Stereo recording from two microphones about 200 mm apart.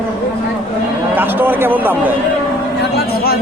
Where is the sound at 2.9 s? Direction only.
50° left (ahead or behind).